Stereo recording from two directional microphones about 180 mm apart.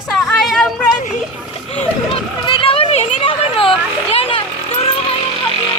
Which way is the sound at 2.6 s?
30° left (ahead or behind).